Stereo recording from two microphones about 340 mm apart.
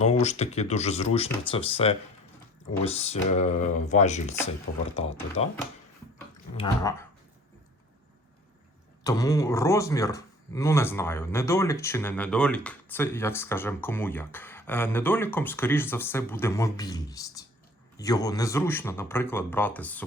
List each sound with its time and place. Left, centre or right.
0.0 s speech: centre
9.0 s speech: centre